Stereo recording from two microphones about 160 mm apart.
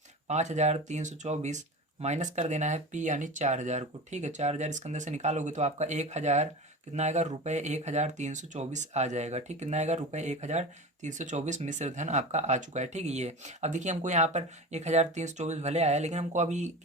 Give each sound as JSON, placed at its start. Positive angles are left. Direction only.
{"t": 0.3, "sound": "speech", "side_deg": -45}